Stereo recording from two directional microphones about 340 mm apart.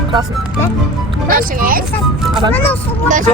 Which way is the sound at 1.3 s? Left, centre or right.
Right.